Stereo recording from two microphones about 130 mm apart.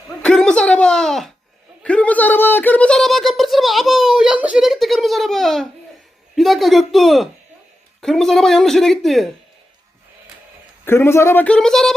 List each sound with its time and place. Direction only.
0.2 s a sound: 5° left (ahead or behind)
1.8 s speech: 10° left (ahead or behind)
10.8 s speech: 20° left (ahead or behind); by 11.9 s 5° left (ahead or behind)